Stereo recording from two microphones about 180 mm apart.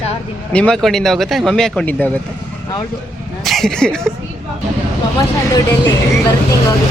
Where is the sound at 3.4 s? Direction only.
Centre (ahead or behind).